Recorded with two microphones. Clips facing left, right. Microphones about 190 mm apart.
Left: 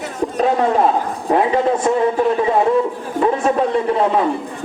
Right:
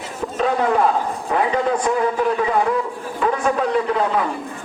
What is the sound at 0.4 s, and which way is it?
A man's voice, 25° left (ahead or behind).